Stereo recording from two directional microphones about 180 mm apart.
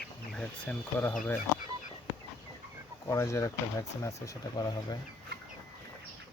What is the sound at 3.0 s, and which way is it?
Speech, 20° left (ahead or behind).